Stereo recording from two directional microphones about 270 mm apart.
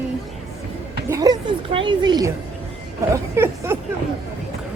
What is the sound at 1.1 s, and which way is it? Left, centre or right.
Speech, centre.